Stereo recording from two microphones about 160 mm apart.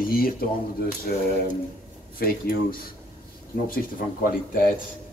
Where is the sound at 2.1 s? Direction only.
65° left (ahead or behind).